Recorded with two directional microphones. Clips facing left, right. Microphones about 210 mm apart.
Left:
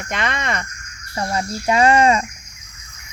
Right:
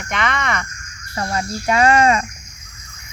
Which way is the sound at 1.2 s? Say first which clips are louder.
Even; 20° left (ahead or behind).